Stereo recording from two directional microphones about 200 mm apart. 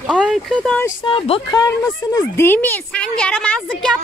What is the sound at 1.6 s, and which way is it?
A woman's voice, 15° left (ahead or behind).